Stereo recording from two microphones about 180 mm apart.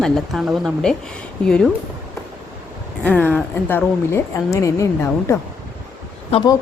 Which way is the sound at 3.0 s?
10° left (ahead or behind).